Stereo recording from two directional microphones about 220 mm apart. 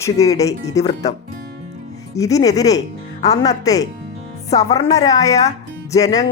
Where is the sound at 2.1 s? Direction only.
15° left (ahead or behind).